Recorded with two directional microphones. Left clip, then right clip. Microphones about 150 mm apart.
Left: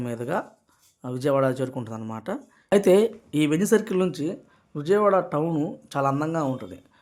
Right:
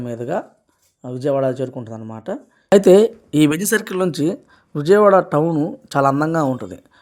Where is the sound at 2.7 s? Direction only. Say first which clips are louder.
Right 8 dB; 35° right (ahead or behind).